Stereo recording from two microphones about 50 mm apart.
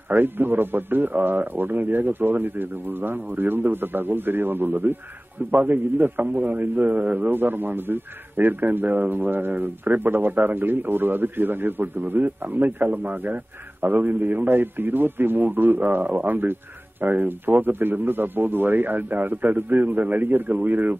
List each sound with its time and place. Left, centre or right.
0.1 s a man's voice: right